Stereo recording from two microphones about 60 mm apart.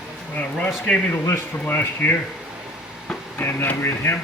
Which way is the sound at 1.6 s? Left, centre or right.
Left.